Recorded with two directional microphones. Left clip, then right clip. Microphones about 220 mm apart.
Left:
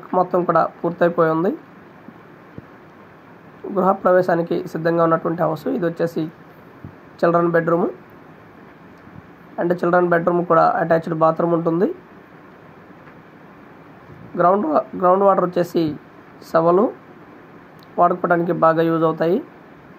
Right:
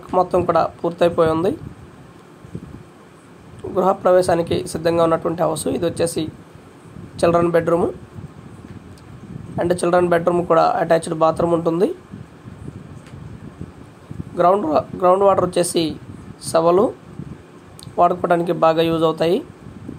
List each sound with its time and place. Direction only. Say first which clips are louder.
0.1 s speech: right 1 dB; centre (ahead or behind)
3.7 s speech: right 1 dB; 5° left (ahead or behind)
9.6 s speech: even; 5° left (ahead or behind)
14.3 s speech: right 1 dB; centre (ahead or behind)
17.9 s speech: right 1 dB; centre (ahead or behind)